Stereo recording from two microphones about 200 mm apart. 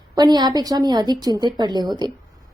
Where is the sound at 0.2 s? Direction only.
20° right (ahead or behind).